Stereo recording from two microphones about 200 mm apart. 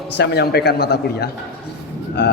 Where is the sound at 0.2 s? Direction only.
55° left (ahead or behind).